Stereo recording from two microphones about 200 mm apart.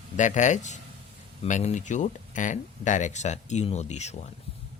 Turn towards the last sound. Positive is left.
turn(degrees=35)  # may be behind; listen again after turning